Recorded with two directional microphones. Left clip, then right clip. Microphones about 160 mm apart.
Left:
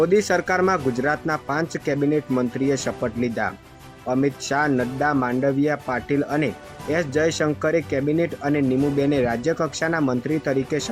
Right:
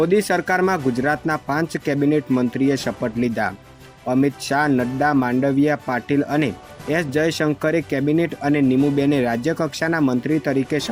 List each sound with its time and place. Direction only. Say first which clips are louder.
0.0 s speech: right 1 dB; 30° right (ahead or behind)